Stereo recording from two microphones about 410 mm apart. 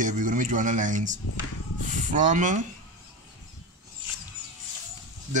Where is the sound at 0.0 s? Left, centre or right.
Centre.